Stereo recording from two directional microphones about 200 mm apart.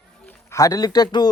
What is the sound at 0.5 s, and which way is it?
Speech, 15° left (ahead or behind).